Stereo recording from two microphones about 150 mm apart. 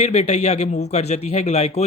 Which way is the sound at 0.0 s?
50° left (ahead or behind).